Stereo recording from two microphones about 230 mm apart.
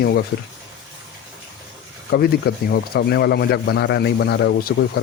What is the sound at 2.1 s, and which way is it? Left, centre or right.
Speech, left.